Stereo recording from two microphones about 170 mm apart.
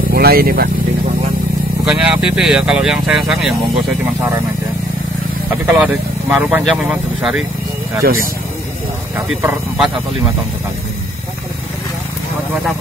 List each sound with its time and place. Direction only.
0.1 s speech: 65° right (ahead or behind)
1.9 s speech: 5° right (ahead or behind)
5.7 s speech: 5° right (ahead or behind)
8.0 s speech: 60° right (ahead or behind)
9.4 s speech: 5° right (ahead or behind)